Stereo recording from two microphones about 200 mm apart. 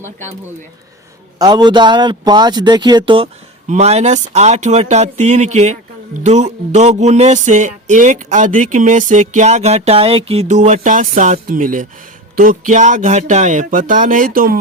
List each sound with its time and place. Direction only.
1.4 s speech: 20° right (ahead or behind)
3.7 s music: 35° right (ahead or behind)